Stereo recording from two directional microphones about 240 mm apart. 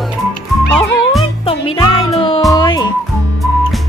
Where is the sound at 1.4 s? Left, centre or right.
Left.